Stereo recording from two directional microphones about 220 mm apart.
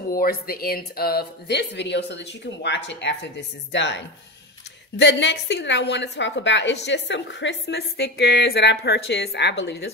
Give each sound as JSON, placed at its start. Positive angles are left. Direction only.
{"t": 0.1, "sound": "a woman's voice", "side_deg": 40}